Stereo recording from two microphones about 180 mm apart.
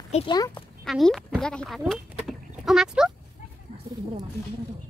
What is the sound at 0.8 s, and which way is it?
Speech, centre (ahead or behind).